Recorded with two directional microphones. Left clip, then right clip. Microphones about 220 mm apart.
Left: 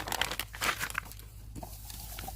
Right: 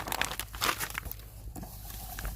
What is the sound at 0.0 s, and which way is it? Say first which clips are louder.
Crumpling: even; 10° right (ahead or behind).